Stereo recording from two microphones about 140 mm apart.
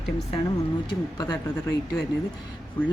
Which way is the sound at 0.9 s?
30° left (ahead or behind).